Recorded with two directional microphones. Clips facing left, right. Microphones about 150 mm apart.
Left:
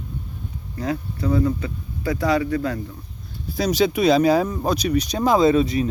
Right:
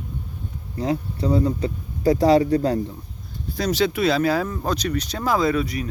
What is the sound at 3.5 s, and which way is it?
Speech, 10° left (ahead or behind).